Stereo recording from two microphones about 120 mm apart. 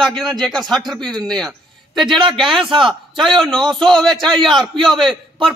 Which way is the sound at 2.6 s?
45° right (ahead or behind).